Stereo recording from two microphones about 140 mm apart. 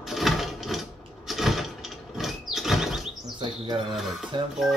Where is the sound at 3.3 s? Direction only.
35° right (ahead or behind).